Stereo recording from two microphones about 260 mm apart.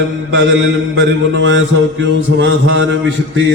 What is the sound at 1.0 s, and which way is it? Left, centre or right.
Mantra, right.